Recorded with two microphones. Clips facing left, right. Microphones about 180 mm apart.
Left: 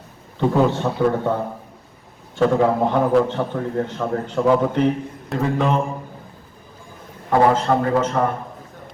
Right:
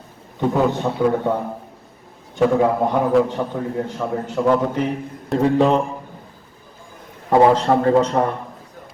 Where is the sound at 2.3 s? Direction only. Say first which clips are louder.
Right 1 dB; 15° right (ahead or behind).